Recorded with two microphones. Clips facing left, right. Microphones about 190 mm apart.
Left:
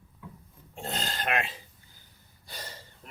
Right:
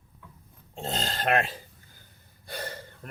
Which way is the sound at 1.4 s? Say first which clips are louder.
Right 4 dB; 45° right (ahead or behind).